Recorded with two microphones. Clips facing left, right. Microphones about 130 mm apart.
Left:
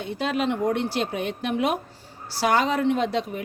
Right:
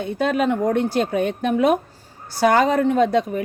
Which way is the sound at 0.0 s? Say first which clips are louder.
Right 5 dB; 50° right (ahead or behind).